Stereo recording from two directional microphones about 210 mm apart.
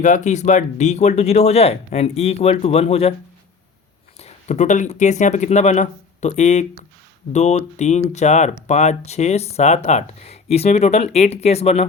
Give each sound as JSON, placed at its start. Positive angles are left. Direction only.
{"t": 0.0, "sound": "speech", "side_deg": 35}
{"t": 4.2, "sound": "speech", "side_deg": 35}